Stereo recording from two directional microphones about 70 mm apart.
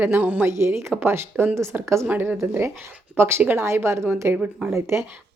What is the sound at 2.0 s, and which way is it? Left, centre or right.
Speech, right.